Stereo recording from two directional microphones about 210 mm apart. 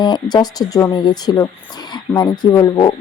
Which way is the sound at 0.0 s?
20° left (ahead or behind).